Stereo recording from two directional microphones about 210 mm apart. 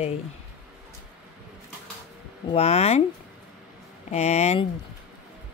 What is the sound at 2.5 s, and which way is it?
Speech, 30° left (ahead or behind).